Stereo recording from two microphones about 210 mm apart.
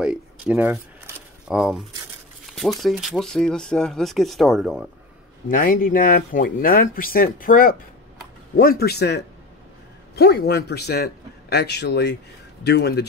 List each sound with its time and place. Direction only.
0.0 s speech: 5° right (ahead or behind)
5.5 s speech: 40° left (ahead or behind)